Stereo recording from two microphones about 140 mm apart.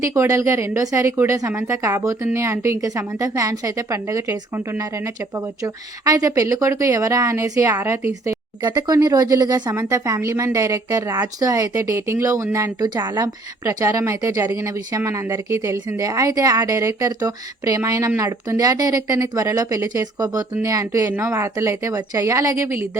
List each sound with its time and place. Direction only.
0.0 s a woman's voice: 20° right (ahead or behind)